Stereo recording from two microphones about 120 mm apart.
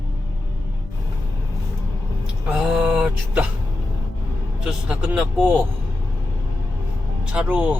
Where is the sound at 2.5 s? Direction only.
5° right (ahead or behind).